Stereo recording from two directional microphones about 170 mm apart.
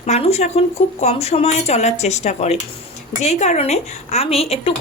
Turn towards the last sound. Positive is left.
turn(degrees=35)  # may be behind; listen again after turning